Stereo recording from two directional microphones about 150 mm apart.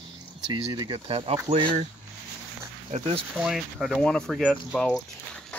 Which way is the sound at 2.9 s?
50° right (ahead or behind).